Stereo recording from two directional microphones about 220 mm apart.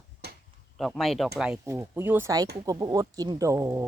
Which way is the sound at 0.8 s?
Centre (ahead or behind).